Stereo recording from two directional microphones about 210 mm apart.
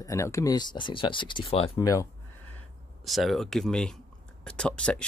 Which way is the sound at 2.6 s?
Centre (ahead or behind).